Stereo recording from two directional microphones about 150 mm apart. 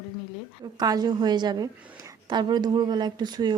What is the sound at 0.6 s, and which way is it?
Speech, 25° right (ahead or behind).